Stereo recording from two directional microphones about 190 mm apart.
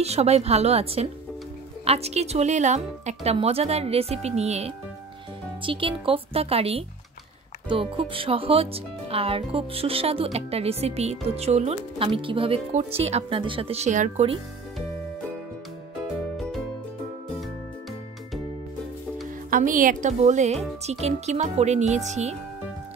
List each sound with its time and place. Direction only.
0.0 s a woman's voice: 35° right (ahead or behind)
19.5 s a woman's voice: 45° right (ahead or behind)